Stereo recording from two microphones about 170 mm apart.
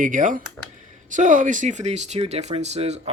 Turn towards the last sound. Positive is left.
turn(degrees=-40)  # may be behind; listen again after turning